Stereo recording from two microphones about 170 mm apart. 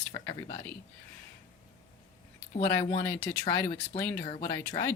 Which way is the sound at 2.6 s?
20° left (ahead or behind).